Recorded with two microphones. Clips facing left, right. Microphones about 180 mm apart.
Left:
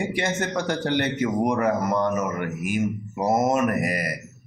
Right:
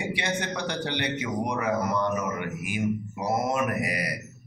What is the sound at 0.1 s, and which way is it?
A man's voice, 45° left (ahead or behind).